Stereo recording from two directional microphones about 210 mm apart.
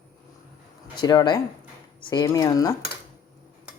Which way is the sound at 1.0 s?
20° left (ahead or behind).